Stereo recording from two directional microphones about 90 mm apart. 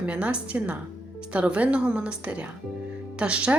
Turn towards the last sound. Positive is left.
turn(degrees=-15)  # may be behind; listen again after turning